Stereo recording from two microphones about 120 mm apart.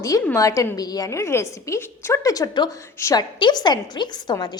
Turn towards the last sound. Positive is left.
turn(degrees=35)  # may be behind; listen again after turning